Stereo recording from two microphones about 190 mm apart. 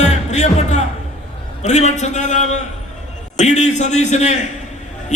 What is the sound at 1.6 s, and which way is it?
A man's voice, 35° left (ahead or behind).